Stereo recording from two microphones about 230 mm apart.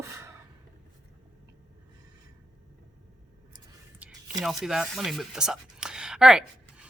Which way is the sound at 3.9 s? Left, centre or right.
Centre.